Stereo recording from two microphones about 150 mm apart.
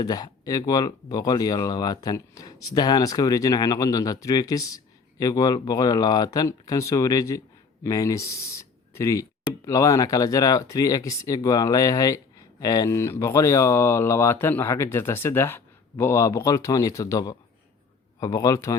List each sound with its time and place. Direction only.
0.0 s speech: 25° left (ahead or behind)